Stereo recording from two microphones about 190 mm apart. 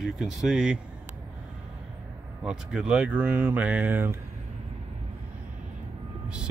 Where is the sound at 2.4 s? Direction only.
5° right (ahead or behind).